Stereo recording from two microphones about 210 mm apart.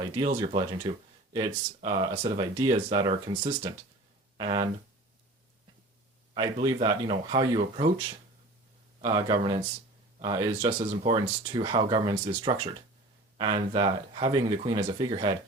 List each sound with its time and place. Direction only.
0.5 s speech: 20° right (ahead or behind)
6.3 s speech: 25° right (ahead or behind)
9.0 s speech: 20° right (ahead or behind)